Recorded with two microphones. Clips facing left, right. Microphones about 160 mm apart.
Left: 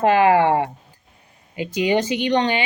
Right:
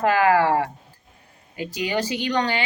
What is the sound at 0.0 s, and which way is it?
Speech, 20° left (ahead or behind).